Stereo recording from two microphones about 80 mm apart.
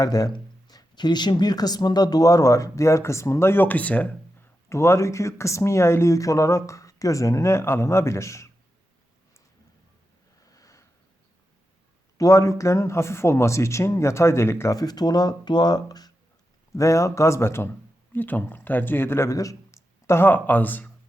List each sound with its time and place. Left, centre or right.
0.0 s speech: left; by 4.1 s centre
4.7 s speech: left
10.4 s sniff: left
12.1 s speech: left
14.8 s speech: left
16.7 s speech: left